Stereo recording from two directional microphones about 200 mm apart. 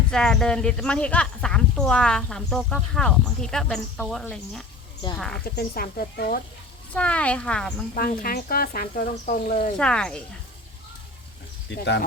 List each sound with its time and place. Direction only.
0.1 s speech: 5° left (ahead or behind)
5.5 s speech: 50° left (ahead or behind)
6.9 s speech: 5° left (ahead or behind)
8.2 s speech: 50° left (ahead or behind)
9.7 s speech: 5° left (ahead or behind)
11.7 s speech: 60° left (ahead or behind)